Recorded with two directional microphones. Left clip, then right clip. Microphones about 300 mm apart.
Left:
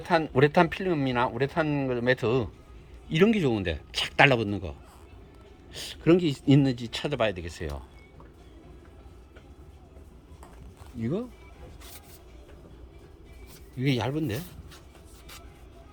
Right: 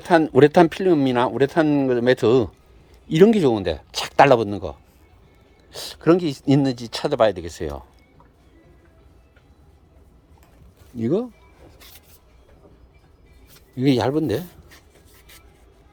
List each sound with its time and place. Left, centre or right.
0.0 s speech: right
5.7 s speech: centre
11.0 s speech: right
13.7 s speech: right